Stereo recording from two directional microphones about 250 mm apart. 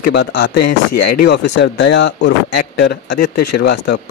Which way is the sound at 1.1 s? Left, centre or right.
Left.